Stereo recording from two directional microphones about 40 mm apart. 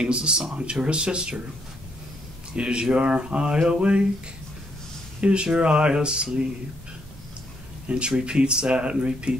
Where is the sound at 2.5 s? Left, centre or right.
Right.